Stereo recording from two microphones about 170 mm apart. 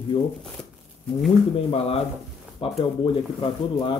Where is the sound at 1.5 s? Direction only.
35° left (ahead or behind).